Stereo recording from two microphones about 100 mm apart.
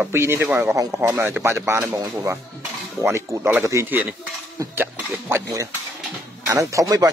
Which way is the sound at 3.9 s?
20° right (ahead or behind).